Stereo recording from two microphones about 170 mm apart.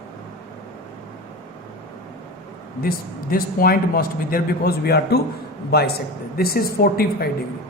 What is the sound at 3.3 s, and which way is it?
A man's voice, 60° left (ahead or behind).